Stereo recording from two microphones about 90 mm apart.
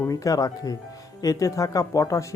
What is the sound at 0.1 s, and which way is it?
Speech, 40° left (ahead or behind).